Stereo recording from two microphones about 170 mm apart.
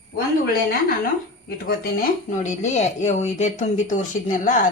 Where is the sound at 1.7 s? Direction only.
60° left (ahead or behind).